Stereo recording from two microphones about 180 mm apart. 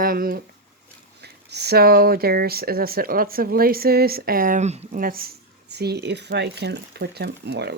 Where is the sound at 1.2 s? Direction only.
65° right (ahead or behind); by 5.0 s 40° right (ahead or behind).